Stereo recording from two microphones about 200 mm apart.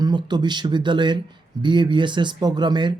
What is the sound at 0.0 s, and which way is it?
Speech, 20° right (ahead or behind).